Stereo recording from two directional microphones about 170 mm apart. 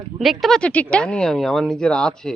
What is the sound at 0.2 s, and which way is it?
A woman's voice, centre (ahead or behind).